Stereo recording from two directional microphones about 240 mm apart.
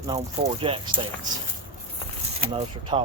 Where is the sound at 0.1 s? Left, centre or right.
Right.